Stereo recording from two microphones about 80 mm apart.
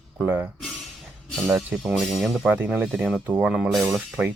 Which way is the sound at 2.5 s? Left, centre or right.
Right.